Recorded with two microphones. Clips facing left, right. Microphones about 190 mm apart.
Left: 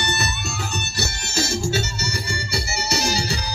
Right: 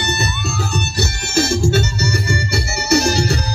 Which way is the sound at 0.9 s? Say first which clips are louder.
Right 8 dB; 55° right (ahead or behind).